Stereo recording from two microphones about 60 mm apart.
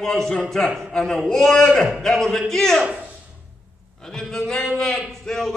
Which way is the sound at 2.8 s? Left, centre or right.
Right.